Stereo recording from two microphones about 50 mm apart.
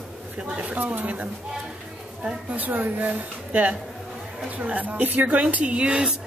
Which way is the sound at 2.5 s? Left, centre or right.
Right.